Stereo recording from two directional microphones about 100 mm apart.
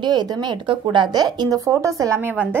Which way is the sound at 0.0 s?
45° right (ahead or behind).